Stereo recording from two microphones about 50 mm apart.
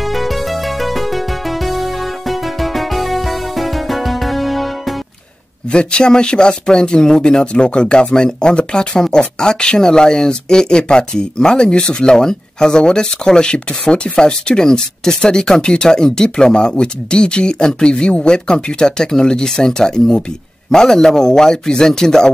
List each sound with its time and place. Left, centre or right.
0.0 s music: centre
5.7 s speech: centre